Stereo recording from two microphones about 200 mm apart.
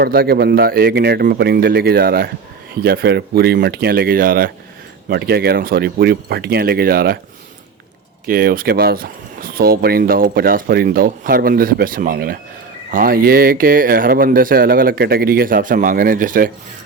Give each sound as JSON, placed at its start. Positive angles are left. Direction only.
{"t": 0.0, "sound": "speech", "side_deg": -50}
{"t": 8.3, "sound": "speech", "side_deg": -45}